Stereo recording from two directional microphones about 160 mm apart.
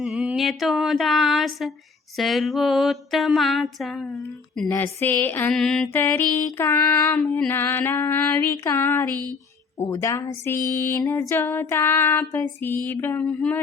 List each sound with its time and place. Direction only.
0.0 s a sound: 5° right (ahead or behind)
4.7 s female singing: 15° left (ahead or behind)
5.5 s female singing: centre (ahead or behind)